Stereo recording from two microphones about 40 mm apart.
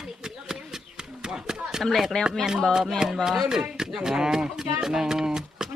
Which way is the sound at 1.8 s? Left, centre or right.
Centre.